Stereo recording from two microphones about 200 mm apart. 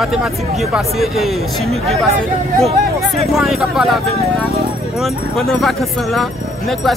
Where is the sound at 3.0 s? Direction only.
Centre (ahead or behind).